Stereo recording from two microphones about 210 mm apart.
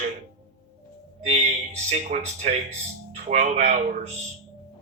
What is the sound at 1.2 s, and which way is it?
A man's voice, 30° right (ahead or behind).